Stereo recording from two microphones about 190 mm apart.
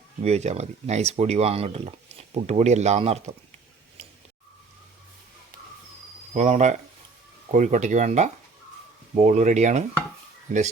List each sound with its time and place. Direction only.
0.2 s speech: 35° right (ahead or behind)
6.3 s speech: 40° right (ahead or behind)